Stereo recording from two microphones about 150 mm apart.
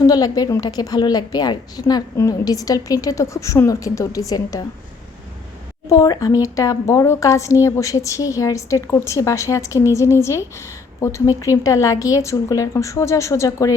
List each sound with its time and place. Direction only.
0.0 s a woman's voice: 25° left (ahead or behind)
5.9 s a woman's voice: 25° left (ahead or behind)